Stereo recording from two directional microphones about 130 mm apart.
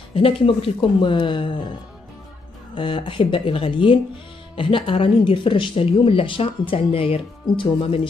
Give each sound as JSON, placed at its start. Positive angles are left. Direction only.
{"t": 0.1, "sound": "speech", "side_deg": 45}
{"t": 2.7, "sound": "speech", "side_deg": 40}